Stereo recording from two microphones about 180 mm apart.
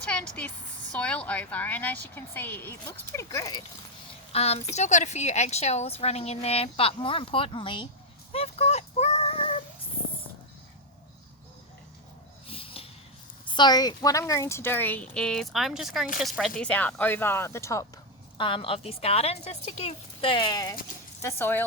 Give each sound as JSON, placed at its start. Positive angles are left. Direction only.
{"t": 0.0, "sound": "a woman's voice", "side_deg": 5}
{"t": 4.3, "sound": "a woman's voice", "side_deg": 35}
{"t": 8.3, "sound": "a sound", "side_deg": 35}
{"t": 12.5, "sound": "a sound", "side_deg": 30}
{"t": 13.5, "sound": "a woman's voice", "side_deg": 25}
{"t": 18.3, "sound": "a woman's voice", "side_deg": 30}